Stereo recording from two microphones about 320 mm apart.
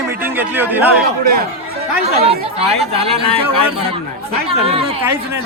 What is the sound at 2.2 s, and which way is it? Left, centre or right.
Speech, centre.